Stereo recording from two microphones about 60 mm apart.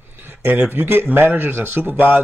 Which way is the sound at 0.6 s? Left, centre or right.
Right.